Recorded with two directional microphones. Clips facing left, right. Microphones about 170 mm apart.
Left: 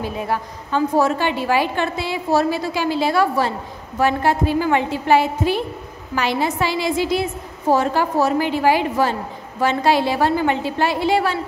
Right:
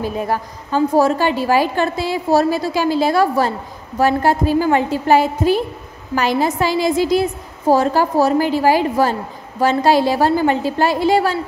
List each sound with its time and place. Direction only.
0.0 s a woman's voice: 40° right (ahead or behind)